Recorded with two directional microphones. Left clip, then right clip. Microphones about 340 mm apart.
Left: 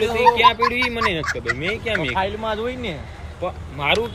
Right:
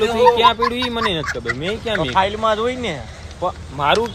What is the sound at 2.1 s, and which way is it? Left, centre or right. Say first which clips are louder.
Speech: right 6 dB; right.